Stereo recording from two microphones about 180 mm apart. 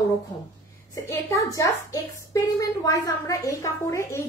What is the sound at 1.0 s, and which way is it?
A woman's voice, 15° left (ahead or behind).